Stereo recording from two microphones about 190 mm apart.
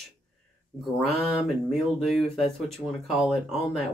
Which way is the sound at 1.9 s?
Centre (ahead or behind).